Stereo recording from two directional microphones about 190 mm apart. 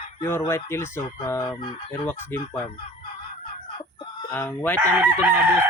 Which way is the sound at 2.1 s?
10° left (ahead or behind).